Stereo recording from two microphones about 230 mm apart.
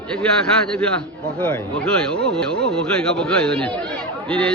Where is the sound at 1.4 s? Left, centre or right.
Centre.